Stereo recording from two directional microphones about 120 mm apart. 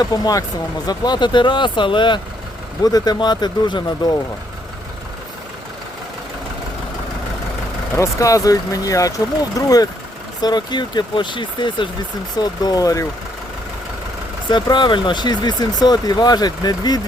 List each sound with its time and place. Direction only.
0.0 s speech: 30° left (ahead or behind)
7.9 s speech: 25° left (ahead or behind)
14.5 s speech: 40° left (ahead or behind)